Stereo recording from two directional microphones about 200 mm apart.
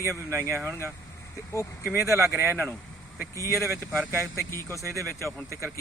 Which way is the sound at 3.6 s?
Centre (ahead or behind).